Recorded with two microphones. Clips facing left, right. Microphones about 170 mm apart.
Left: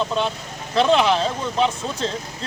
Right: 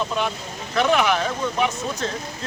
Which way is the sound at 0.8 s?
25° left (ahead or behind).